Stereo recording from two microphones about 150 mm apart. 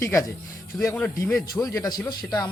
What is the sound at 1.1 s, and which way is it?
Speech, 20° left (ahead or behind).